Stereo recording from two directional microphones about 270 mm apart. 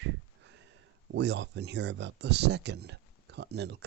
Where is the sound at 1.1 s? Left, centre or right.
Right.